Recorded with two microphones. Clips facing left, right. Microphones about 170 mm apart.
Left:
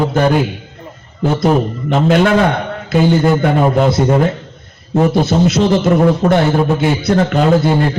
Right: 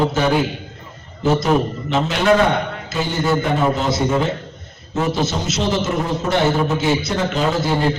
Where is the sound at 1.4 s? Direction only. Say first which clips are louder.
Left 4 dB; 55° left (ahead or behind).